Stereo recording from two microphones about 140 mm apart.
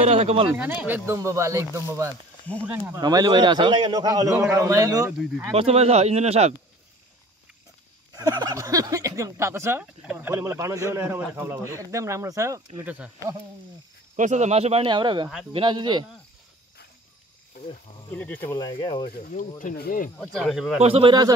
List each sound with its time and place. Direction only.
0.0 s speech: 50° right (ahead or behind)
0.6 s speech: 10° right (ahead or behind)
5.5 s speech: 45° right (ahead or behind)
8.1 s speech: 25° right (ahead or behind); by 13.1 s 10° right (ahead or behind)
14.1 s speech: 60° right (ahead or behind)
14.9 s speech: 35° right (ahead or behind)
17.6 s cricket: 90° left
18.1 s speech: 10° left (ahead or behind)
18.5 s speech: 30° left (ahead or behind)
19.0 s speech: 80° left
20.2 s speech: centre (ahead or behind)
20.8 s speech: 40° right (ahead or behind)